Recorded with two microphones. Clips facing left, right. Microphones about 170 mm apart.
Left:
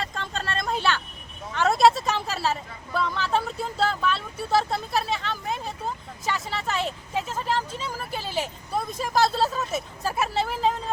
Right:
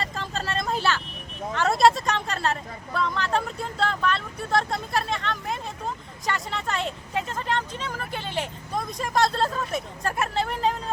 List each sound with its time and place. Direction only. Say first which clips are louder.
0.0 s vehicle: right 1 dB; centre (ahead or behind)
1.5 s speech: left 1 dB; centre (ahead or behind)